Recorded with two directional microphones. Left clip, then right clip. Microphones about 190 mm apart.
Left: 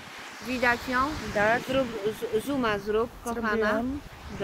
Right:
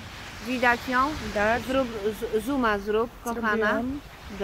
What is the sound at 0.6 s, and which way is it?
Speech, 20° right (ahead or behind).